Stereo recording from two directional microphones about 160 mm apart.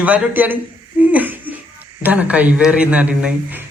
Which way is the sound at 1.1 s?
10° right (ahead or behind).